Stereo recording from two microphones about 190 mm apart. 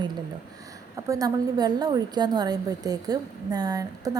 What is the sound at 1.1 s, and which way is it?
A woman's voice, 20° right (ahead or behind).